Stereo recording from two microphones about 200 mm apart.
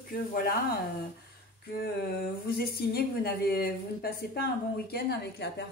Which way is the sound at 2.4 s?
50° left (ahead or behind).